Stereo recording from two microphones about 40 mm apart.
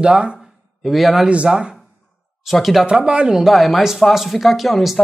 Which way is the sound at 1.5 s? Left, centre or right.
Right.